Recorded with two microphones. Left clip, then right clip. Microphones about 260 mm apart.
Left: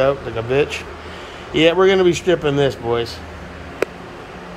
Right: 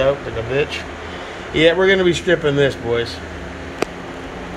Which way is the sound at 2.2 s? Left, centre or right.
Left.